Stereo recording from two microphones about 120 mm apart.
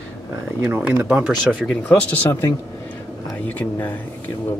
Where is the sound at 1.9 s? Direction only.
15° left (ahead or behind).